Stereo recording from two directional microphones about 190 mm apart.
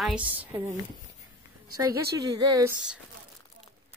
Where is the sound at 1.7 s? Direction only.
20° right (ahead or behind).